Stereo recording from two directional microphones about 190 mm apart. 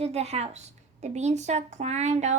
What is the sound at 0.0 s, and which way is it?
A woman's voice, 35° right (ahead or behind).